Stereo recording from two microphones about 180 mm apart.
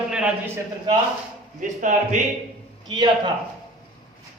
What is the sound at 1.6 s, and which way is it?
Speech, 45° right (ahead or behind).